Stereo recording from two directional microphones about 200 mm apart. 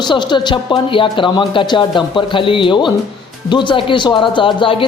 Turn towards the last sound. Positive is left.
turn(degrees=25)  # may be behind; listen again after turning